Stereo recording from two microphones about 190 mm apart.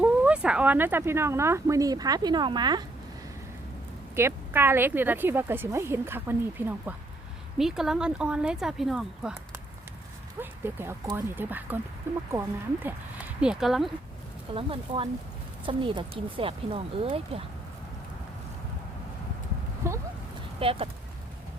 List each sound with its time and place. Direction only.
0.0 s speech: 5° right (ahead or behind); by 2.8 s 20° right (ahead or behind)
4.1 s speech: 15° right (ahead or behind)
10.4 s speech: 10° right (ahead or behind)
14.5 s speech: 30° right (ahead or behind)
19.9 s a sound: 15° right (ahead or behind)
20.6 s speech: 30° right (ahead or behind)